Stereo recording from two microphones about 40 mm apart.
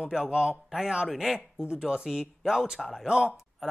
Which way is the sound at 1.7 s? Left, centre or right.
Centre.